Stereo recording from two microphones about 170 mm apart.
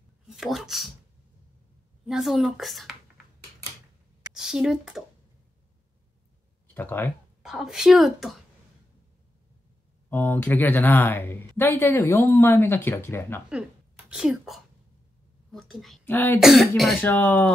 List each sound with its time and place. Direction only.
0.4 s a woman's voice: centre (ahead or behind)
2.0 s a woman's voice: centre (ahead or behind)
4.3 s speech: 5° right (ahead or behind)
6.7 s speech: 10° left (ahead or behind)
7.4 s a woman's voice: centre (ahead or behind)
10.0 s a woman's voice: 10° left (ahead or behind)
13.5 s a woman's voice: 5° right (ahead or behind); by 16.3 s 10° left (ahead or behind)
16.3 s a woman's voice: centre (ahead or behind)
17.0 s a woman's voice: 10° left (ahead or behind)